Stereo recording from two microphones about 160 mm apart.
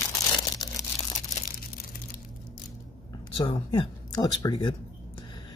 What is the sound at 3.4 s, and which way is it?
Speech, 30° left (ahead or behind).